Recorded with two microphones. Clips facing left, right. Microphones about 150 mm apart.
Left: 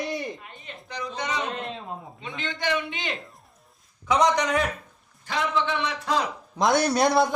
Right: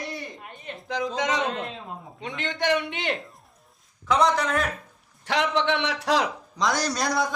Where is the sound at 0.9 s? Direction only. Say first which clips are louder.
Right 5 dB; 90° right.